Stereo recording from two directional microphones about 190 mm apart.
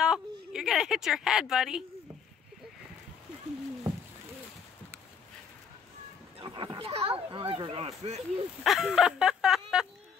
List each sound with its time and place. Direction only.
0.0 s a sound: 5° right (ahead or behind)
6.4 s speech: 25° right (ahead or behind)
8.6 s chicken: centre (ahead or behind)